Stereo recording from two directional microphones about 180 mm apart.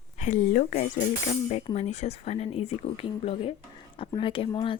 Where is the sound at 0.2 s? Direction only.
45° left (ahead or behind).